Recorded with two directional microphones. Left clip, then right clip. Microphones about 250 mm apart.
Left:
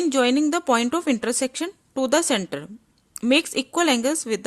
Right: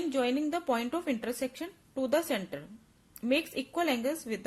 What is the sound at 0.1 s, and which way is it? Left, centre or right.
A woman's voice, left.